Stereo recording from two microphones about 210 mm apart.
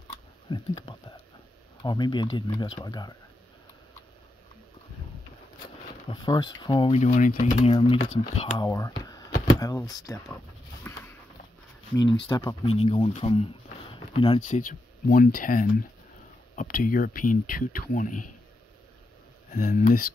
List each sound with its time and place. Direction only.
0.1 s a sound: 20° left (ahead or behind)
1.8 s speech: 20° left (ahead or behind)
6.0 s speech: 20° left (ahead or behind)
7.7 s speech: 20° left (ahead or behind)
8.4 s a sound: 20° left (ahead or behind)
9.8 s speech: 15° left (ahead or behind)
10.8 s a sound: 10° left (ahead or behind)
11.9 s speech: 20° left (ahead or behind)
12.6 s speech: 30° left (ahead or behind)
14.4 s speech: 40° left (ahead or behind)
19.5 s speech: 45° left (ahead or behind)